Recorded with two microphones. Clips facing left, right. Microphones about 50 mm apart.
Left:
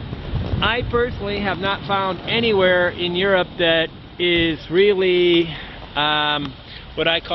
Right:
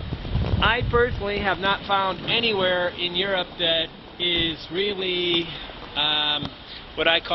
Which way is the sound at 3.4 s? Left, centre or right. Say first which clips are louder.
Left 7 dB; left.